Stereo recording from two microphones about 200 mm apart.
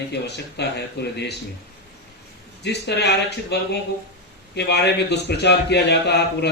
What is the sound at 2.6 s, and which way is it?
A man's voice, 60° left (ahead or behind).